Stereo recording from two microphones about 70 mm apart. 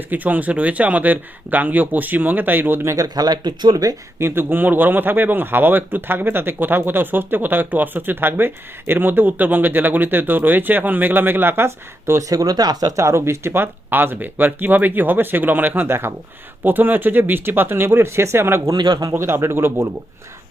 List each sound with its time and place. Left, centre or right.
0.1 s speech: right
2.9 s speech: right
4.2 s speech: right
12.3 s speech: right
13.0 s speech: right
18.7 s a man's voice: right
19.1 s speech: right